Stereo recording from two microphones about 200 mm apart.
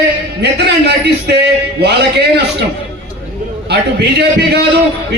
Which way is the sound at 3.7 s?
55° right (ahead or behind).